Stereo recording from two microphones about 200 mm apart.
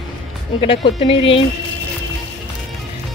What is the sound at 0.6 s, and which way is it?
Speech, 30° left (ahead or behind).